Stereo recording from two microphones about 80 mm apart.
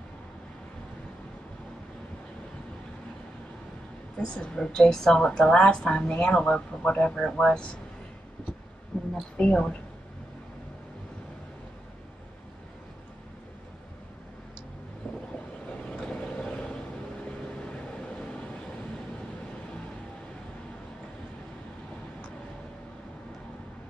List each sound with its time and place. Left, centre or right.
4.2 s a woman's voice: centre
8.9 s a sound: centre
9.4 s a woman's voice: centre
15.0 s vehicle: left